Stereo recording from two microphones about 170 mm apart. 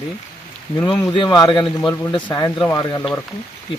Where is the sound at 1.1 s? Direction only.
25° left (ahead or behind).